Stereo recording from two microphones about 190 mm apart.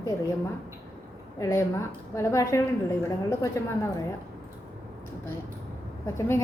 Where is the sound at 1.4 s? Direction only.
15° left (ahead or behind).